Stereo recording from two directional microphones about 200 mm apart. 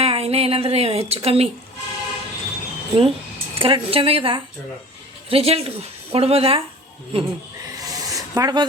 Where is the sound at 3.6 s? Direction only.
25° right (ahead or behind).